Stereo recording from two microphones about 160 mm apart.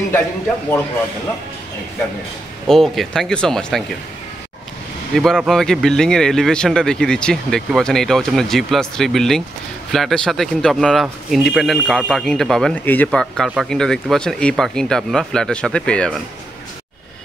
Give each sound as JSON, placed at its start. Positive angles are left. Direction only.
{"t": 2.7, "sound": "speech", "side_deg": 0}
{"t": 5.1, "sound": "speech", "side_deg": 0}